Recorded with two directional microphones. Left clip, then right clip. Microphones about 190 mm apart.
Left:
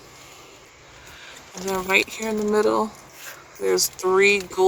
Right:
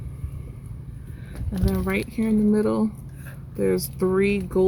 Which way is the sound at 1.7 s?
25° left (ahead or behind).